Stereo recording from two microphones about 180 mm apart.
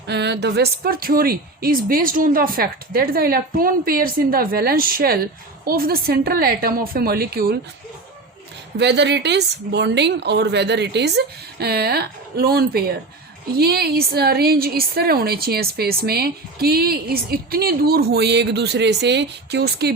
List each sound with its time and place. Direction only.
0.1 s a woman's voice: 70° right (ahead or behind)
8.8 s a woman's voice: 70° right (ahead or behind)